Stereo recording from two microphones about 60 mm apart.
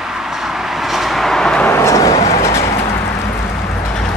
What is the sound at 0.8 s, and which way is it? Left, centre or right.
Vehicle, centre.